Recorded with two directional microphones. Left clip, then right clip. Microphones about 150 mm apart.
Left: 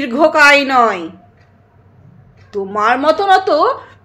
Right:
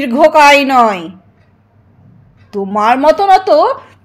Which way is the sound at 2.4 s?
40° right (ahead or behind).